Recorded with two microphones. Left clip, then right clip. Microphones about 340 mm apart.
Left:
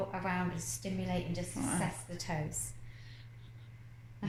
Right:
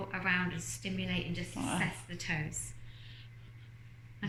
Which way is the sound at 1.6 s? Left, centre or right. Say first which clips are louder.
Right 2 dB; centre.